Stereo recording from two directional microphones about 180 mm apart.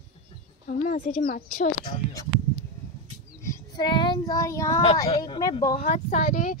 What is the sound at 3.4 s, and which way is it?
Child singing, 20° left (ahead or behind).